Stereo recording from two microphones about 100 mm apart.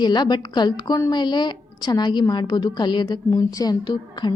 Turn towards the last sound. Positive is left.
turn(degrees=50)  # may be behind; listen again after turning